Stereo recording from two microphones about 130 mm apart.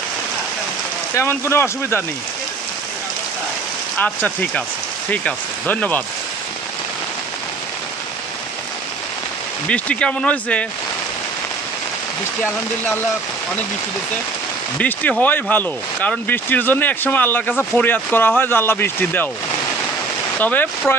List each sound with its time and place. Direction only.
1.1 s speech: 20° left (ahead or behind)
3.9 s speech: 10° left (ahead or behind)
9.6 s speech: 10° left (ahead or behind)
14.8 s speech: 10° left (ahead or behind)
20.4 s speech: 10° left (ahead or behind)